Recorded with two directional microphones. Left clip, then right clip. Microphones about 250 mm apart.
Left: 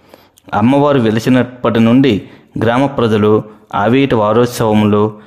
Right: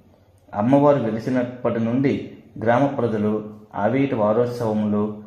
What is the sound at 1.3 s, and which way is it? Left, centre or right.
Speech, left.